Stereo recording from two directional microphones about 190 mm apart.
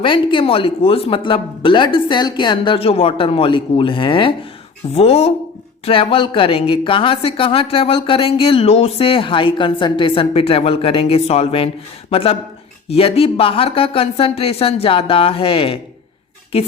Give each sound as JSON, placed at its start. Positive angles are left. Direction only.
{"t": 0.0, "sound": "a woman's voice", "side_deg": 25}